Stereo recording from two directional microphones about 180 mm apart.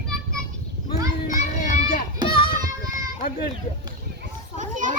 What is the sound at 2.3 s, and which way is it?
Music, 55° left (ahead or behind).